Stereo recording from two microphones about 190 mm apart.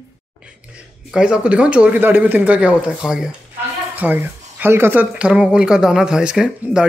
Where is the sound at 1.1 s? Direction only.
5° right (ahead or behind).